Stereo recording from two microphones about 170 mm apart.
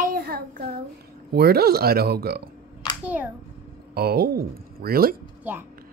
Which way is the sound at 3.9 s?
65° right (ahead or behind).